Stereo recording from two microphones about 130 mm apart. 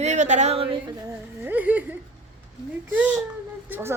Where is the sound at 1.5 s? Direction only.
10° right (ahead or behind).